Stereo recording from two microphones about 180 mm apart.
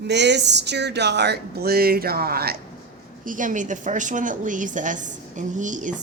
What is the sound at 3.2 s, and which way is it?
A woman's voice, 45° right (ahead or behind).